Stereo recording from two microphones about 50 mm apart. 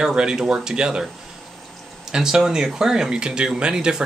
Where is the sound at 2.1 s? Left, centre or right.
Centre.